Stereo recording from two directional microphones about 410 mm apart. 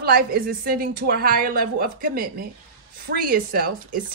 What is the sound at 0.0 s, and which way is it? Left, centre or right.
A woman's voice, right.